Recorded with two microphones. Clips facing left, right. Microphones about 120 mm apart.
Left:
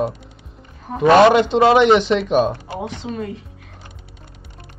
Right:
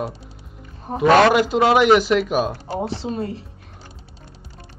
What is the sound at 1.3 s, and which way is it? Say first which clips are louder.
Speech: left 3 dB; 5° right (ahead or behind).